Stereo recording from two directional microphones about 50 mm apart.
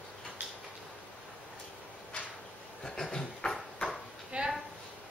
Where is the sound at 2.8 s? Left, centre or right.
Centre.